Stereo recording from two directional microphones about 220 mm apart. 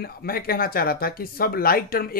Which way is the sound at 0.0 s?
45° left (ahead or behind).